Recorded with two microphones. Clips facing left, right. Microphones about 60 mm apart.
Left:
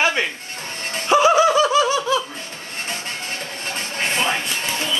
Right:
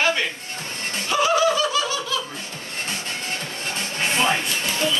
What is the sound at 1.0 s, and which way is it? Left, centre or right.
Snicker, left.